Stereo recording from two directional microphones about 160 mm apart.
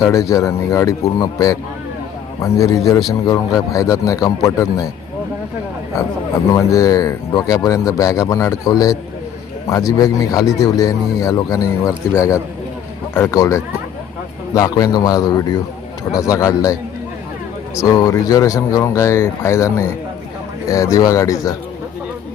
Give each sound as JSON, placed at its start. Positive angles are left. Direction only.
{"t": 0.0, "sound": "speech", "side_deg": 20}
{"t": 6.5, "sound": "speech", "side_deg": 20}
{"t": 17.7, "sound": "speech", "side_deg": 20}